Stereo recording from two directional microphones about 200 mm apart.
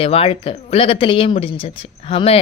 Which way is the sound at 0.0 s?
30° left (ahead or behind).